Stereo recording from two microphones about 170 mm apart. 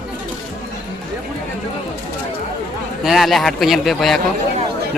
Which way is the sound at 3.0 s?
Centre (ahead or behind).